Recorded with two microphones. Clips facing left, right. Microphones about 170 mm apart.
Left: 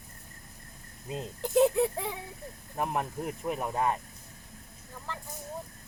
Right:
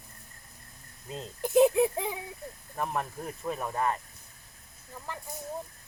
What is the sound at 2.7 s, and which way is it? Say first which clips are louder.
Speech: left 1 dB; 15° left (ahead or behind).